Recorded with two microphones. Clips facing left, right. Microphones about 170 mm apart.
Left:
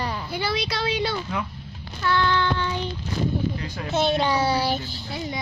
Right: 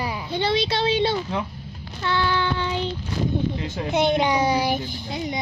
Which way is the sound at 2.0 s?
15° right (ahead or behind).